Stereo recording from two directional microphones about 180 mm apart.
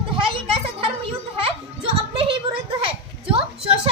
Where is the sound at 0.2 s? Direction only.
30° right (ahead or behind).